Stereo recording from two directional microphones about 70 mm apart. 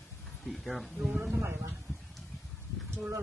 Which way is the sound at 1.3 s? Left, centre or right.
Right.